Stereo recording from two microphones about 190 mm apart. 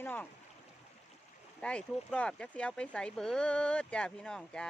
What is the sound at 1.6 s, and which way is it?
Speech, 5° left (ahead or behind).